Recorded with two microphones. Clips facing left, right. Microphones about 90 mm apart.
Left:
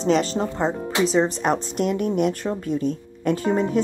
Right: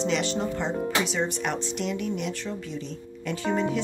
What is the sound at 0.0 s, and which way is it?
Speech, 40° left (ahead or behind).